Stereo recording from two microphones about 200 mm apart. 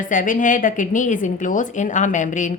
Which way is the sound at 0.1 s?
40° left (ahead or behind).